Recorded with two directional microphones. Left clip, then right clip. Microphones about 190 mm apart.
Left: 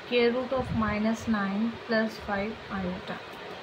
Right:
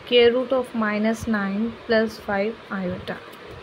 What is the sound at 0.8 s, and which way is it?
Speech, 40° right (ahead or behind).